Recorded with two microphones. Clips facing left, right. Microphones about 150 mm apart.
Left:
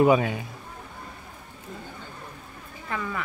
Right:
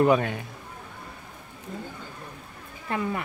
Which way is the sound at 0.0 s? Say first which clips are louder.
Left 1 dB; 5° left (ahead or behind).